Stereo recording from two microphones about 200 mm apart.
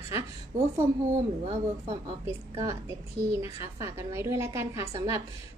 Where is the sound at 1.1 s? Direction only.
35° right (ahead or behind).